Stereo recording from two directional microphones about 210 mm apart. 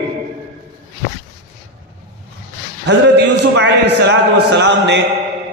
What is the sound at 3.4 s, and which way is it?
A man's voice, 55° right (ahead or behind).